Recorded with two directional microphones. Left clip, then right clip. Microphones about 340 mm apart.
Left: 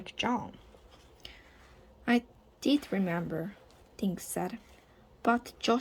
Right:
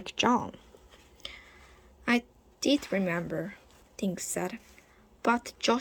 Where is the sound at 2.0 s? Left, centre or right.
Centre.